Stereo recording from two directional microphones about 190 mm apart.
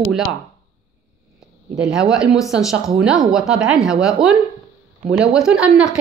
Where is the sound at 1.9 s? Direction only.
5° right (ahead or behind).